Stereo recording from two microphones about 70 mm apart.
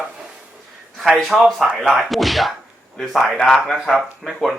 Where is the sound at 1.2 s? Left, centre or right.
Centre.